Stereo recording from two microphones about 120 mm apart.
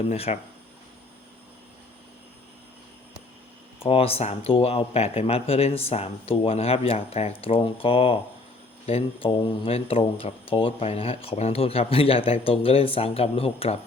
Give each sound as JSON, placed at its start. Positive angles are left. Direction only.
{"t": 0.1, "sound": "speech", "side_deg": 70}
{"t": 3.8, "sound": "speech", "side_deg": 50}